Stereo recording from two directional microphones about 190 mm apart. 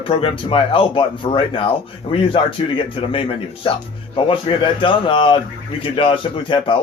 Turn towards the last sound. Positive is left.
turn(degrees=25)  # may be behind; listen again after turning